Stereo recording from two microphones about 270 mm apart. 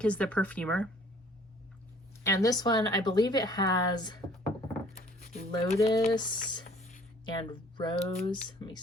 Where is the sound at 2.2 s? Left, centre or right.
Centre.